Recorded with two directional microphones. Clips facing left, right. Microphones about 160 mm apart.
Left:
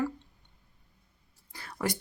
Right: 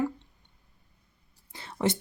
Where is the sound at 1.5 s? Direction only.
25° right (ahead or behind).